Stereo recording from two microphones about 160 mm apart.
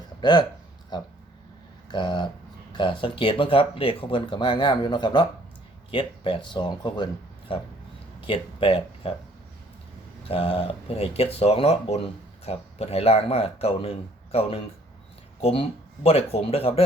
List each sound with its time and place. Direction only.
0.2 s speech: 25° left (ahead or behind)
10.2 s speech: 35° left (ahead or behind)